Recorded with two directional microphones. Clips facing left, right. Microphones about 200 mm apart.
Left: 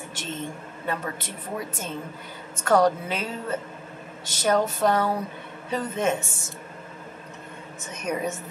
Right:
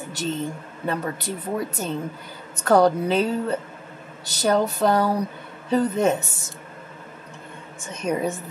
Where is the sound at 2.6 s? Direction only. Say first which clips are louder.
Right 3 dB; 35° right (ahead or behind).